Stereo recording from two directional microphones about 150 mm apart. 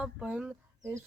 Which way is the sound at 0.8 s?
20° right (ahead or behind).